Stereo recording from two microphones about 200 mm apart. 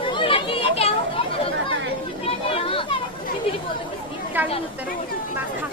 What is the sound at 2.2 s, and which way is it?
Chatter, 30° left (ahead or behind).